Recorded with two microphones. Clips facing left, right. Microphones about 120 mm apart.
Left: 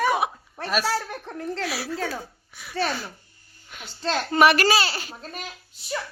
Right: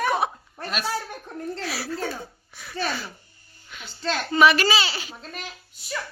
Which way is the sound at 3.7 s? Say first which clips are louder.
Left 1 dB; 45° left (ahead or behind).